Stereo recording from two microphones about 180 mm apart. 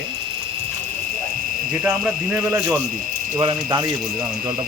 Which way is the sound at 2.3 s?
15° right (ahead or behind).